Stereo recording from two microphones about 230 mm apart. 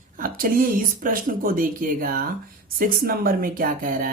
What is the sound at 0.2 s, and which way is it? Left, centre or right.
Speech, right.